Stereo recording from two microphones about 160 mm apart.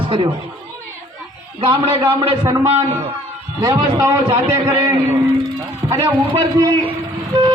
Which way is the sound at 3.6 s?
20° right (ahead or behind).